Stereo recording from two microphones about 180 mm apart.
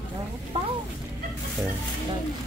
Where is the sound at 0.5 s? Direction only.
35° right (ahead or behind).